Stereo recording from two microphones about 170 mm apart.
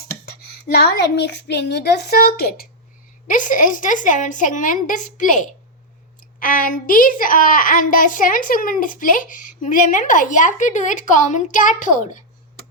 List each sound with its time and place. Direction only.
0.3 s child singing: 65° left (ahead or behind)
3.2 s a child's voice: 50° left (ahead or behind)